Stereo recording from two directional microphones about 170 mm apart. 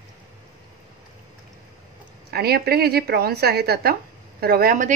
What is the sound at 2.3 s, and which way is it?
Speech, 65° right (ahead or behind).